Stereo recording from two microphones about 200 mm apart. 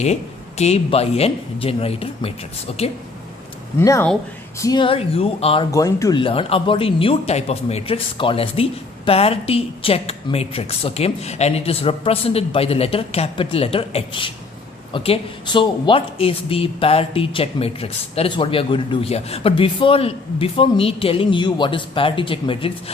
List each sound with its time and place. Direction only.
0.0 s speech: 35° left (ahead or behind)
3.8 s speech: 15° left (ahead or behind)
5.7 s speech: 15° left (ahead or behind)